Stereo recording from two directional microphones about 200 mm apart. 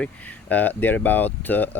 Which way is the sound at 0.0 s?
5° left (ahead or behind).